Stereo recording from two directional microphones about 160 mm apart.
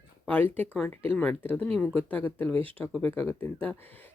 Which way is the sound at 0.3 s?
10° left (ahead or behind).